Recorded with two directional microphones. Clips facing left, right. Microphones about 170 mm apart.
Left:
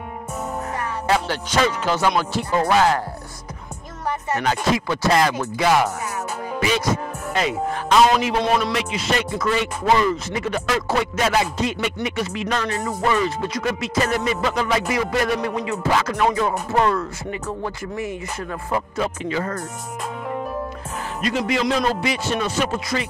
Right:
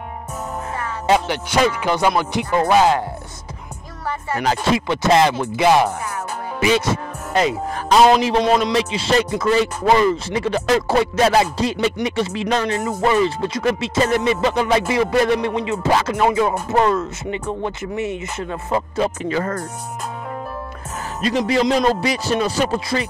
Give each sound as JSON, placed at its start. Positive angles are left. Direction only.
{"t": 1.0, "sound": "music", "side_deg": -15}
{"t": 4.4, "sound": "a man's voice", "side_deg": -35}
{"t": 4.8, "sound": "speech", "side_deg": -20}
{"t": 7.3, "sound": "a man's voice", "side_deg": -35}
{"t": 21.2, "sound": "a man's voice", "side_deg": -35}